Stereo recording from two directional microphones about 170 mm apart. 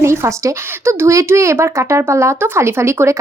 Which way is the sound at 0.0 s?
15° right (ahead or behind).